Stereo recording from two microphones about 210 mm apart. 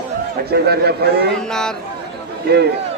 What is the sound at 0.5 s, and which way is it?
Speech, 50° right (ahead or behind).